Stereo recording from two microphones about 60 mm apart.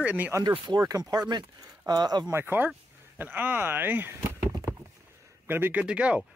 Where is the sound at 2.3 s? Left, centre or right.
Right.